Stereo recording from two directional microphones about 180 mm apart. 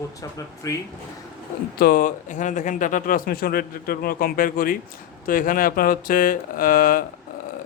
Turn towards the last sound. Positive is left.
turn(degrees=50)  # may be behind; listen again after turning